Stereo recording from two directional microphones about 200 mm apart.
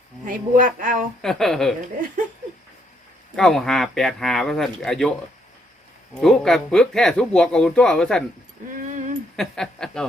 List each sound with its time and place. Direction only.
0.3 s a sound: 40° right (ahead or behind)
1.2 s speech: centre (ahead or behind)
3.3 s speech: centre (ahead or behind)
6.1 s speech: centre (ahead or behind)
8.9 s a sound: 40° right (ahead or behind)
9.3 s speech: 5° left (ahead or behind)